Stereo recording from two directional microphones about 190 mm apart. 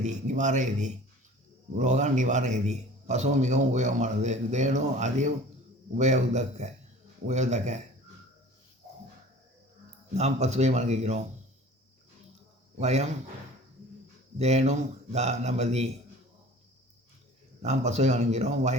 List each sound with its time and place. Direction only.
0.0 s a man's voice: 40° right (ahead or behind)
10.2 s a man's voice: 35° right (ahead or behind)
12.8 s a man's voice: 35° right (ahead or behind)
14.3 s a man's voice: 35° right (ahead or behind)
17.6 s a man's voice: 35° right (ahead or behind)